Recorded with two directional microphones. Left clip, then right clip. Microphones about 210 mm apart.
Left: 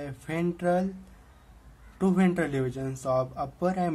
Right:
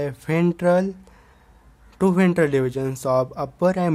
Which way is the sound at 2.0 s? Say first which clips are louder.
Right 8 dB; 45° right (ahead or behind).